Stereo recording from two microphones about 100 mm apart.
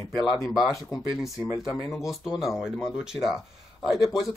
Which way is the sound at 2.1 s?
5° right (ahead or behind).